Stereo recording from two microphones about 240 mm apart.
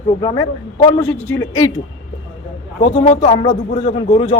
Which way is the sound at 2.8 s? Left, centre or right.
Left.